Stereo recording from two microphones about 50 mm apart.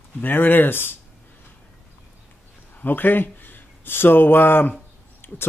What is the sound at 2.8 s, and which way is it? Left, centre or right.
Speech, left.